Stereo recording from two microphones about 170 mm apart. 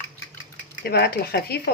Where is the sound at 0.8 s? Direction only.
70° left (ahead or behind).